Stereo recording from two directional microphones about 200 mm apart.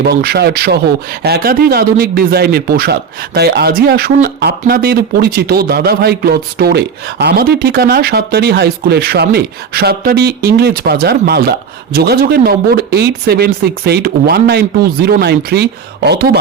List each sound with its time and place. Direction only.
0.0 s speech: 50° right (ahead or behind)